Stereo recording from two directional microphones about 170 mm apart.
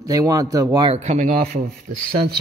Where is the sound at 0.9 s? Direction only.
45° right (ahead or behind); by 1.6 s 60° right (ahead or behind).